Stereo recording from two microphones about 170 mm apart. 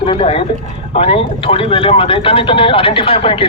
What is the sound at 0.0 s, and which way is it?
Speech, 35° left (ahead or behind).